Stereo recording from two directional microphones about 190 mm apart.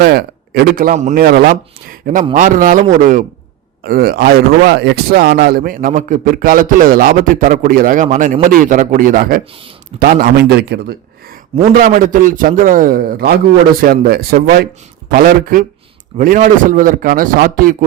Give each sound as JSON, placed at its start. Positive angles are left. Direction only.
{"t": 0.0, "sound": "a man's voice", "side_deg": -55}
{"t": 11.7, "sound": "speech", "side_deg": -45}